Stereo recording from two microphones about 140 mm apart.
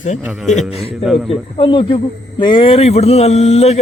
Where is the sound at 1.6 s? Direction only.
35° left (ahead or behind).